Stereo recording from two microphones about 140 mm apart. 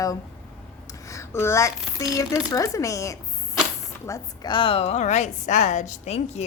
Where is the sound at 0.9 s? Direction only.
20° left (ahead or behind).